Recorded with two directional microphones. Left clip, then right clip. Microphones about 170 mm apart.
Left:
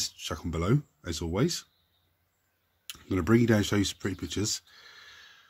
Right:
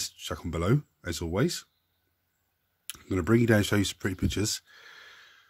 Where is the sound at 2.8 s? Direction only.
40° right (ahead or behind).